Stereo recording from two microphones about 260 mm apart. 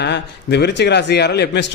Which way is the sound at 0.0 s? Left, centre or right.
Left.